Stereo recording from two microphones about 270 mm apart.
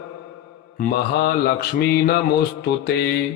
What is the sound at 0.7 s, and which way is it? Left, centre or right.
Mantra, left.